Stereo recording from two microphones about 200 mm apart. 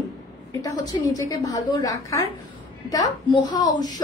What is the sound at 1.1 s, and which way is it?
A woman's voice, 15° left (ahead or behind).